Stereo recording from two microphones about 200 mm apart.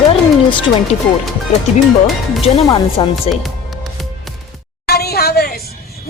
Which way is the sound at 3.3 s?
Centre (ahead or behind).